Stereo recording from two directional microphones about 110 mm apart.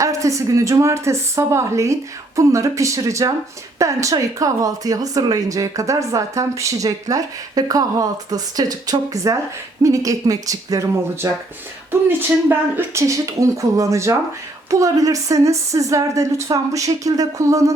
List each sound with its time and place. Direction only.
0.0 s a woman's voice: 30° right (ahead or behind)
11.9 s a woman's voice: 20° right (ahead or behind)